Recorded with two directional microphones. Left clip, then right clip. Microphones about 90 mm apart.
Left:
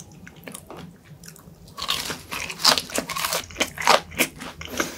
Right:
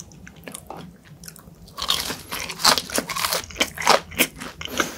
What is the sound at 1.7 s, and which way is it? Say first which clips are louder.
Crunch: right 3 dB; 40° right (ahead or behind).